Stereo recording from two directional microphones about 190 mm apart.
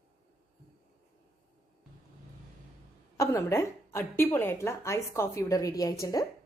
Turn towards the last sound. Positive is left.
turn(degrees=15)  # may be behind; listen again after turning